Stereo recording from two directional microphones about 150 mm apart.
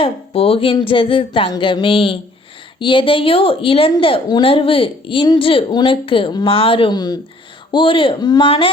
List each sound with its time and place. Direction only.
0.0 s a woman's voice: 40° left (ahead or behind)